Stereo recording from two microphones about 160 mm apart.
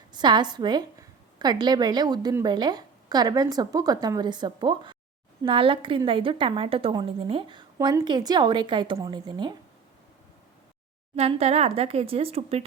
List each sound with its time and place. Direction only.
0.1 s a woman's voice: 30° right (ahead or behind)
11.1 s a woman's voice: 40° right (ahead or behind)